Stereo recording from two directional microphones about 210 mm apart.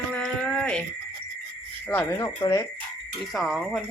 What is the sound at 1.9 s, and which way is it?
Speech, 10° left (ahead or behind).